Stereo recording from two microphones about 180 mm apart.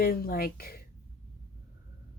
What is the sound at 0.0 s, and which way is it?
Speech, 55° left (ahead or behind).